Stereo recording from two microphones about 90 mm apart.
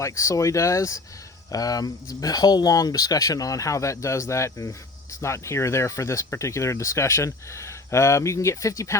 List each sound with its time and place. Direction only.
0.0 s speech: 35° left (ahead or behind)